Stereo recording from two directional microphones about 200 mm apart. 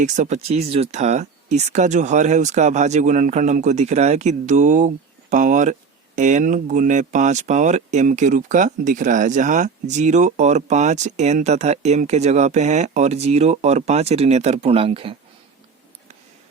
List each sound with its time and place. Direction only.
0.0 s speech: 35° right (ahead or behind)